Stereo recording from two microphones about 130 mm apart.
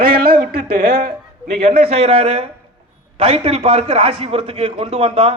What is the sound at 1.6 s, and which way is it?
A man's voice, 50° right (ahead or behind).